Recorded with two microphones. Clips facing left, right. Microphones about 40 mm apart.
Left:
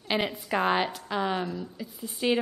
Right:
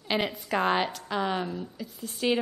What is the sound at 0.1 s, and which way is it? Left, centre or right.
A woman's voice, centre.